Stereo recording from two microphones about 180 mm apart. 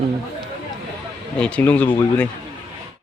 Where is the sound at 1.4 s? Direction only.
5° left (ahead or behind).